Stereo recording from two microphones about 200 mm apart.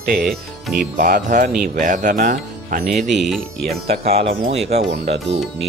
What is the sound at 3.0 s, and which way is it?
Speech, centre (ahead or behind).